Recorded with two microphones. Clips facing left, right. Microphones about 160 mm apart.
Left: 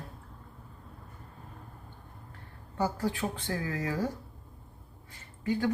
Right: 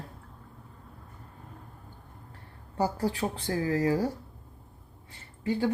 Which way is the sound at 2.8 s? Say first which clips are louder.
Right 2 dB; 35° right (ahead or behind).